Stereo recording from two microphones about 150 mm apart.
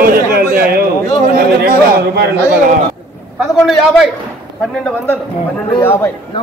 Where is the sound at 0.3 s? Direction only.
80° right.